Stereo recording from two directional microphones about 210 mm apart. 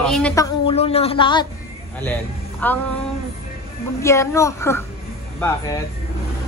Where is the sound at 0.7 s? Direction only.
30° left (ahead or behind).